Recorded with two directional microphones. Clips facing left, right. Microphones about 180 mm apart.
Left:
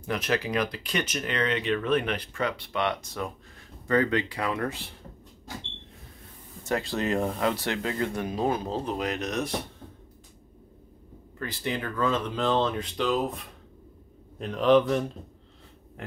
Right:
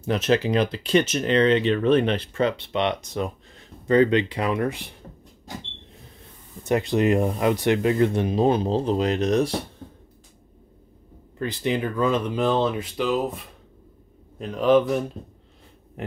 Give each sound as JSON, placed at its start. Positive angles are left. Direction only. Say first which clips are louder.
{"t": 0.0, "sound": "speech", "louder": "right 7 dB", "side_deg": -25}
{"t": 6.6, "sound": "speech", "louder": "right 7 dB", "side_deg": -20}
{"t": 11.3, "sound": "speech", "louder": "right 7 dB", "side_deg": -20}
{"t": 14.4, "sound": "a man's voice", "louder": "right 2 dB", "side_deg": 0}